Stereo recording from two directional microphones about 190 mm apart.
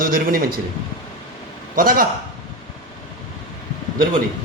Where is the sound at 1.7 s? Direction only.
45° right (ahead or behind).